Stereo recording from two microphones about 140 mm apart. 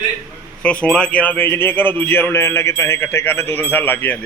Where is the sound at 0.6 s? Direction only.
10° left (ahead or behind).